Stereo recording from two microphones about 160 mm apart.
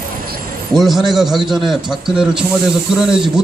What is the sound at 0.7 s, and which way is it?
Speech, centre (ahead or behind).